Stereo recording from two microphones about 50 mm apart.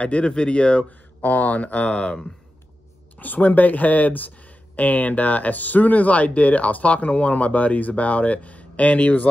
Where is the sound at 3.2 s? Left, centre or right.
Left.